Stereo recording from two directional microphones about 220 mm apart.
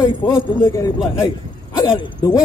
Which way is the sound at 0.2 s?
10° left (ahead or behind).